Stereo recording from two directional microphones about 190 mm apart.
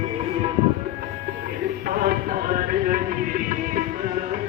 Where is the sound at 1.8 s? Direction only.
50° right (ahead or behind).